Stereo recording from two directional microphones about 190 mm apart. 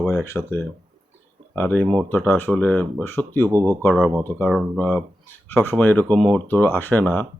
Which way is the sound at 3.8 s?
5° left (ahead or behind).